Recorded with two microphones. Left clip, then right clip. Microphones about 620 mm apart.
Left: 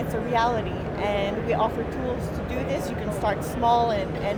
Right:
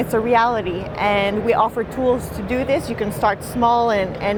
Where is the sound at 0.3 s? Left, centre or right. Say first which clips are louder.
Right 5 dB; right.